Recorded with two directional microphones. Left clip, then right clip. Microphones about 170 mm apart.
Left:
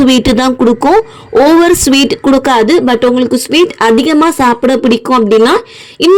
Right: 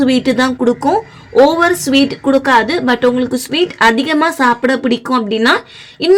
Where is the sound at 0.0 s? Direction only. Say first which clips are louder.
Left 4 dB; 45° left (ahead or behind).